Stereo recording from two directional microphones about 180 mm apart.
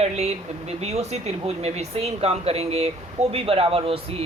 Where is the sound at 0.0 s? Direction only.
35° right (ahead or behind).